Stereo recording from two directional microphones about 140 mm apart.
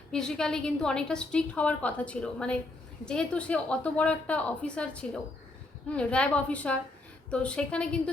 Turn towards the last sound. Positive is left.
turn(degrees=10)  # may be behind; listen again after turning